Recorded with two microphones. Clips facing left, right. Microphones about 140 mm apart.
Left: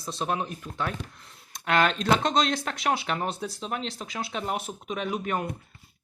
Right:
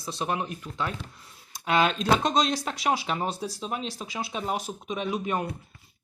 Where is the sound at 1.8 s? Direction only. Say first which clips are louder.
Even; 10° right (ahead or behind).